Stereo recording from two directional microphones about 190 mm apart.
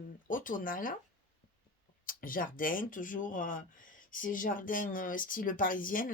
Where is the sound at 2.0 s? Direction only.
45° left (ahead or behind).